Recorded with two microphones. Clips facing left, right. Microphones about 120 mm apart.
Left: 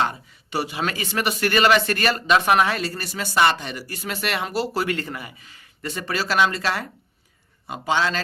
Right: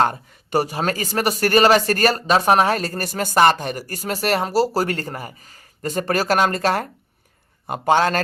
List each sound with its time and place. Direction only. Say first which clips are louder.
0.0 s a man's voice: right 5 dB; 50° right (ahead or behind)